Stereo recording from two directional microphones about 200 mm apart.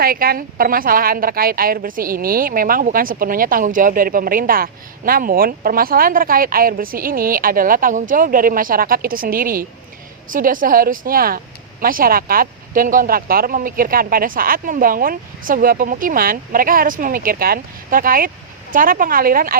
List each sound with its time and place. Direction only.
0.0 s a woman's voice: 45° right (ahead or behind)